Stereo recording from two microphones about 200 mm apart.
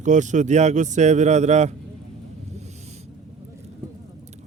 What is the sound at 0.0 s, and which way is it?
Speech, 40° right (ahead or behind).